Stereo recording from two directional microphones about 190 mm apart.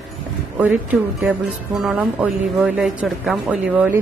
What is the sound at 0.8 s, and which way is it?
Music, 5° right (ahead or behind).